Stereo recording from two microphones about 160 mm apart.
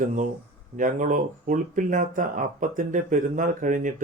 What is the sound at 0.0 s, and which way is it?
Speech, 55° right (ahead or behind).